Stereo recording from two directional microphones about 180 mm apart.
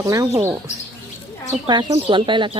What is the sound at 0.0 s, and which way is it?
Speech, 15° right (ahead or behind).